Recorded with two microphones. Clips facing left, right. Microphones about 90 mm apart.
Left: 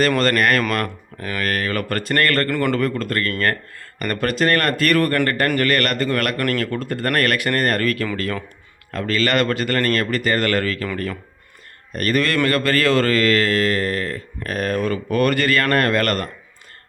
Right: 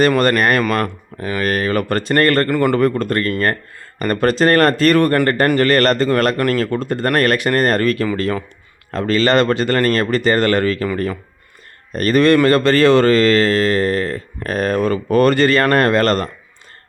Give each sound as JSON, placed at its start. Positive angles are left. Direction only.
{"t": 0.2, "sound": "speech", "side_deg": -20}
{"t": 11.9, "sound": "speech", "side_deg": -25}